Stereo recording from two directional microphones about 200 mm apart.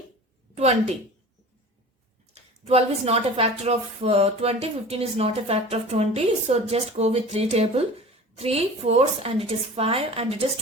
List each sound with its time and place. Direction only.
0.5 s a woman's voice: 35° right (ahead or behind)
2.3 s a woman's voice: 30° right (ahead or behind)